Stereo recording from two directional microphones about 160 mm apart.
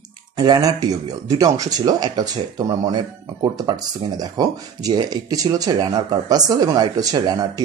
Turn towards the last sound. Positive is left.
turn(degrees=-25)  # may be behind; listen again after turning